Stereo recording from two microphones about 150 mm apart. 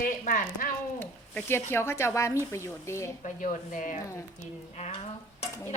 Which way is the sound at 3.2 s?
60° left (ahead or behind).